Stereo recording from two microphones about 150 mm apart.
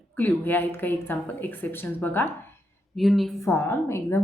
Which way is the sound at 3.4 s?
15° left (ahead or behind).